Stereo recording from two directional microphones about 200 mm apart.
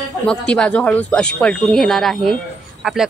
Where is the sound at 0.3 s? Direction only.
5° left (ahead or behind).